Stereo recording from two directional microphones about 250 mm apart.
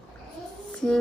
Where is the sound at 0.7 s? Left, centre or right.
Centre.